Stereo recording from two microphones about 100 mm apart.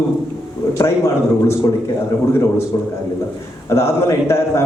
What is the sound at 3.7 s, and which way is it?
Speech, 25° left (ahead or behind).